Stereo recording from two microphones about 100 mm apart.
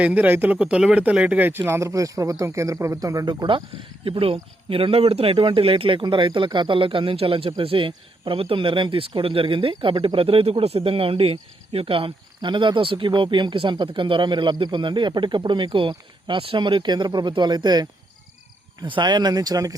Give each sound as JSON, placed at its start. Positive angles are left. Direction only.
{"t": 0.0, "sound": "speech", "side_deg": -15}
{"t": 3.2, "sound": "speech", "side_deg": -55}
{"t": 4.0, "sound": "speech", "side_deg": -65}